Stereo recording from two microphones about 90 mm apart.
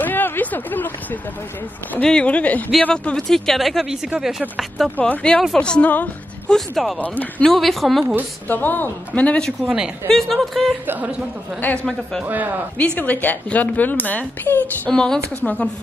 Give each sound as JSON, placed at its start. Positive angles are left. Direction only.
{"t": 0.0, "sound": "a sound", "side_deg": 20}
{"t": 2.0, "sound": "a woman's voice", "side_deg": 10}
{"t": 4.9, "sound": "a woman's voice", "side_deg": 15}
{"t": 6.5, "sound": "speech", "side_deg": 0}
{"t": 7.0, "sound": "a woman's voice", "side_deg": 15}
{"t": 7.5, "sound": "speech", "side_deg": 0}
{"t": 8.0, "sound": "a woman's voice", "side_deg": -20}
{"t": 8.5, "sound": "speech", "side_deg": 20}
{"t": 10.9, "sound": "a woman's voice", "side_deg": -20}
{"t": 12.7, "sound": "a woman's voice", "side_deg": 15}
{"t": 14.9, "sound": "a woman's voice", "side_deg": 5}